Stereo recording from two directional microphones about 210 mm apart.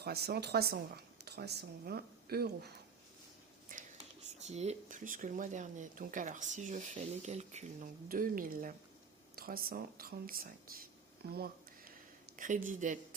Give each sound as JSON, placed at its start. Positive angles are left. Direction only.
{"t": 0.0, "sound": "speech", "side_deg": -50}
{"t": 3.7, "sound": "whispering", "side_deg": -35}
{"t": 4.4, "sound": "speech", "side_deg": -30}